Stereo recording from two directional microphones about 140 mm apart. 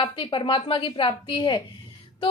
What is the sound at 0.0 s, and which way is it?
A woman's voice, 35° left (ahead or behind).